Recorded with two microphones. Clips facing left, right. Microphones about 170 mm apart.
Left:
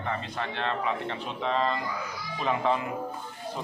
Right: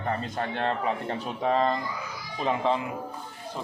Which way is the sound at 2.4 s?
25° right (ahead or behind).